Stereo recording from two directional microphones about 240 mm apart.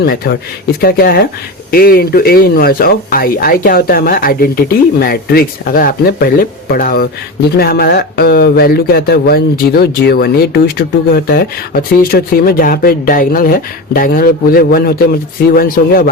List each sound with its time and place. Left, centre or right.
0.0 s speech: left